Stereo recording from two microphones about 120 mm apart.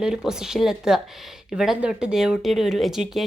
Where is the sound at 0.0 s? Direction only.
5° right (ahead or behind).